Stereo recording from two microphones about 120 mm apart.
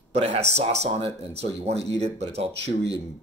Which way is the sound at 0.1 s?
60° right (ahead or behind).